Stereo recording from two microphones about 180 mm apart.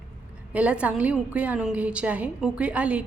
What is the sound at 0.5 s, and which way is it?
A woman's voice, 5° right (ahead or behind).